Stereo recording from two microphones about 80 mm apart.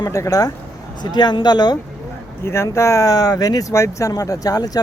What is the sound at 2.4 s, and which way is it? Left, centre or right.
Speech, left.